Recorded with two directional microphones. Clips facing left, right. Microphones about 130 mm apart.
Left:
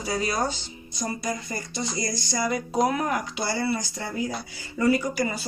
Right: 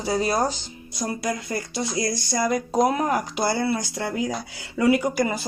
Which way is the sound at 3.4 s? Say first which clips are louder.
Right 4 dB; 50° right (ahead or behind).